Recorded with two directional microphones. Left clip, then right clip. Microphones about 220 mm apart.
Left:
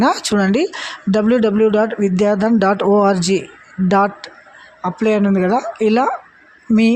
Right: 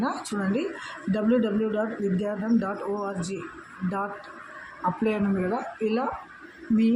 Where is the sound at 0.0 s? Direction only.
45° left (ahead or behind).